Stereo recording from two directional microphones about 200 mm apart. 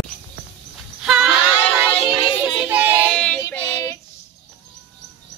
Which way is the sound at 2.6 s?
10° right (ahead or behind).